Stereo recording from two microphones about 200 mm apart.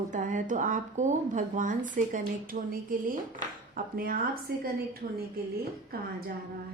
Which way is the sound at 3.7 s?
45° right (ahead or behind).